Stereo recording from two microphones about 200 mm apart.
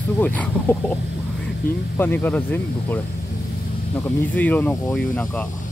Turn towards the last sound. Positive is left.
turn(degrees=5)  # may be behind; listen again after turning